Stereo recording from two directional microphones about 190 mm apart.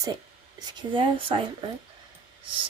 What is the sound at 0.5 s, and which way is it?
A woman's voice, 25° right (ahead or behind).